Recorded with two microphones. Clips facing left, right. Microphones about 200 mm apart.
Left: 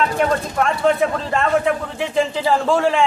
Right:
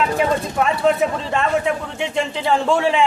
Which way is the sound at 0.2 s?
5° right (ahead or behind).